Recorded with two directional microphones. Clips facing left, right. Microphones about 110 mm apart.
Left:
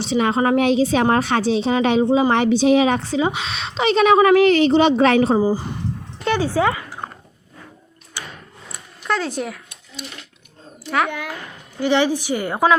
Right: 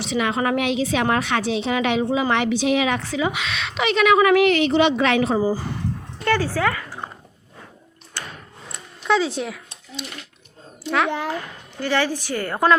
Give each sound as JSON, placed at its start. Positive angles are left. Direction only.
{"t": 0.0, "sound": "a woman's voice", "side_deg": 35}
{"t": 5.4, "sound": "speech", "side_deg": 20}
{"t": 8.2, "sound": "a sound", "side_deg": 10}
{"t": 8.7, "sound": "a sound", "side_deg": 0}
{"t": 10.8, "sound": "a child's voice", "side_deg": 0}
{"t": 11.1, "sound": "speech", "side_deg": -30}
{"t": 11.8, "sound": "a woman's voice", "side_deg": 20}